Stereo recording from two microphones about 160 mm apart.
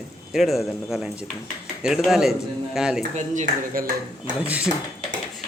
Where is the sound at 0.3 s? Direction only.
Centre (ahead or behind).